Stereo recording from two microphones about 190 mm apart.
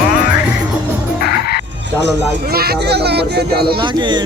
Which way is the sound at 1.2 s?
55° left (ahead or behind).